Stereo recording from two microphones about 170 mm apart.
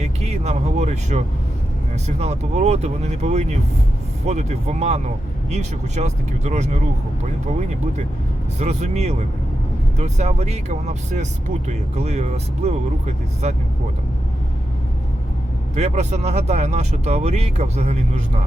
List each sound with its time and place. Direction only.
0.0 s speech: 40° right (ahead or behind)
8.5 s speech: 40° right (ahead or behind)
15.7 s speech: 40° right (ahead or behind)